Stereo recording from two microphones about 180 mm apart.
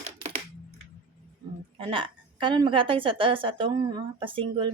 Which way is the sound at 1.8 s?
30° right (ahead or behind).